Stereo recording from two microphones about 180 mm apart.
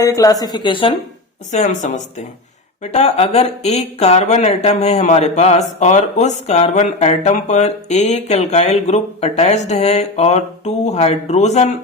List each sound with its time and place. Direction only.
0.0 s speech: 20° left (ahead or behind)
1.5 s speech: 40° left (ahead or behind)